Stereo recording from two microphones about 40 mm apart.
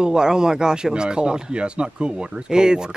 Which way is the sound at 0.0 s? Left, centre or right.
Centre.